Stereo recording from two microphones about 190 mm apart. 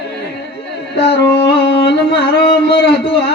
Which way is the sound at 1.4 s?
60° left (ahead or behind).